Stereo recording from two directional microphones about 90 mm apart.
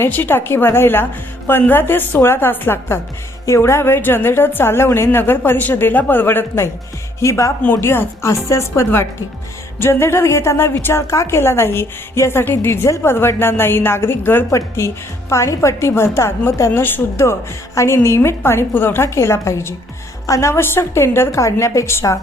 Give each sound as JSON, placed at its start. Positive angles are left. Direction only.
{"t": 0.0, "sound": "a woman's voice", "side_deg": 25}
{"t": 7.2, "sound": "a woman's voice", "side_deg": 35}